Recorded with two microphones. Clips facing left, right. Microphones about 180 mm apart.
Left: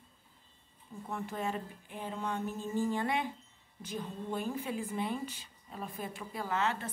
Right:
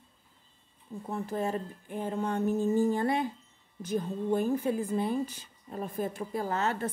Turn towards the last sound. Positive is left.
turn(degrees=-40)  # may be behind; listen again after turning